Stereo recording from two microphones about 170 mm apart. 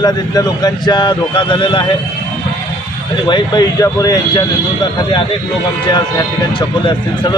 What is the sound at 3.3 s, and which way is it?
A man's voice, 25° left (ahead or behind).